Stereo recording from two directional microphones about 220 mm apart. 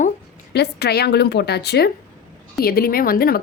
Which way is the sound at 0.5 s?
50° left (ahead or behind).